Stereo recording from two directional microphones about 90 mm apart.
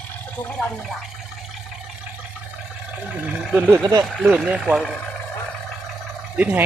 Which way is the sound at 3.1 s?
15° right (ahead or behind).